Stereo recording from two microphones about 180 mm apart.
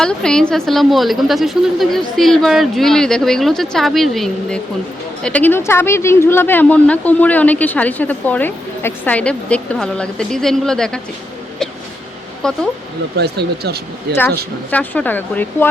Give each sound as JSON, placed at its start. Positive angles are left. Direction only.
{"t": 0.0, "sound": "a woman's voice", "side_deg": 5}
{"t": 12.4, "sound": "a woman's voice", "side_deg": 5}
{"t": 13.1, "sound": "speech", "side_deg": -65}
{"t": 14.7, "sound": "speech", "side_deg": 10}